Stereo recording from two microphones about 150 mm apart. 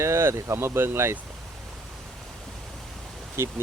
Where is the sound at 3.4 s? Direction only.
15° right (ahead or behind).